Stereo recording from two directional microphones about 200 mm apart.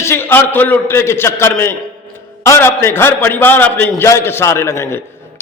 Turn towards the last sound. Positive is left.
turn(degrees=10)  # may be behind; listen again after turning